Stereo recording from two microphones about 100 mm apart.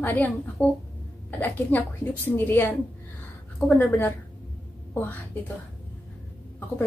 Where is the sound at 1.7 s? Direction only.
20° left (ahead or behind).